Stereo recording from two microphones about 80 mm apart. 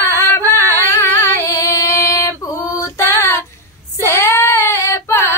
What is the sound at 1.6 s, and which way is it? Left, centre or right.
Female singing, left.